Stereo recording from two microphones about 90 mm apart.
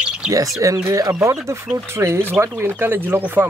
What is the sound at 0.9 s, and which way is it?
Speech, 40° right (ahead or behind).